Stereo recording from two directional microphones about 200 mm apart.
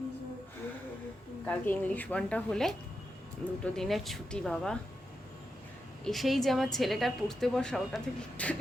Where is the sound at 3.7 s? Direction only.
Centre (ahead or behind).